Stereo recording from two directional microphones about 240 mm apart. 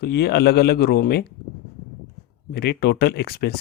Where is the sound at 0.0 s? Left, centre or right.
Left.